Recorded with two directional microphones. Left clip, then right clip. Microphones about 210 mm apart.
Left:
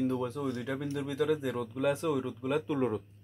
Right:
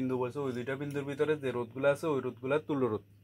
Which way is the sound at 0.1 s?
20° right (ahead or behind).